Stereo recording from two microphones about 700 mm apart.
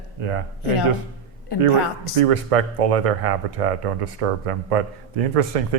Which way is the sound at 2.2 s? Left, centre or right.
Right.